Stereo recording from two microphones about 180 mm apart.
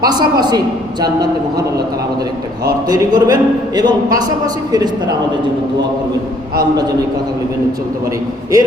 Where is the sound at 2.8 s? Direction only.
20° right (ahead or behind).